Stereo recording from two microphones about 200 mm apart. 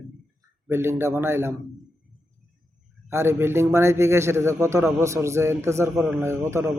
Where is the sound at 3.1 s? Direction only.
10° right (ahead or behind).